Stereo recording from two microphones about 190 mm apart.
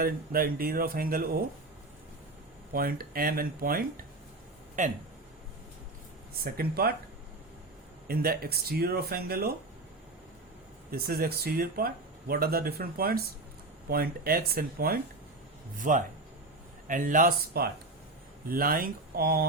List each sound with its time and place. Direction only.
0.0 s speech: 50° right (ahead or behind)
2.7 s speech: 50° right (ahead or behind)
6.4 s speech: 55° right (ahead or behind)
8.0 s speech: 50° right (ahead or behind)
10.9 s speech: 55° right (ahead or behind)